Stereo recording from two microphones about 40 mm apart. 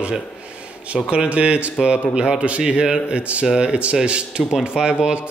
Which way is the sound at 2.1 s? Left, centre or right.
Centre.